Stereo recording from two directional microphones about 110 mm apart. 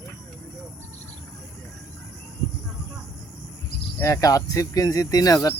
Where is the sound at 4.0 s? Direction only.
30° left (ahead or behind).